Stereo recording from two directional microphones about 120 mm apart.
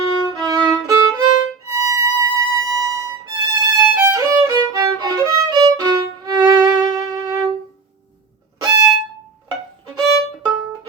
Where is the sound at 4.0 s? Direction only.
25° right (ahead or behind).